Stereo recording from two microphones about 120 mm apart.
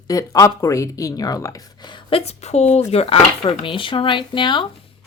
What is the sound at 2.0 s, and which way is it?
Speech, 55° left (ahead or behind).